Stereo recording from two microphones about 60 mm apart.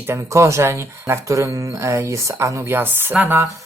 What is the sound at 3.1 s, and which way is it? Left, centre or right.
Speech, right.